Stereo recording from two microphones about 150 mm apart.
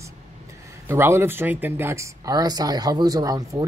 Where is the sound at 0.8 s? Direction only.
15° right (ahead or behind).